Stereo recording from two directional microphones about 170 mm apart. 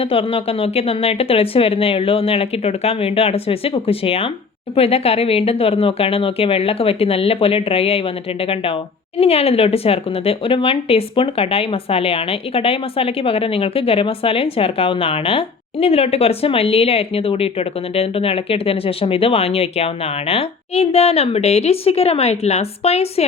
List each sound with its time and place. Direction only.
0.0 s speech: 35° left (ahead or behind)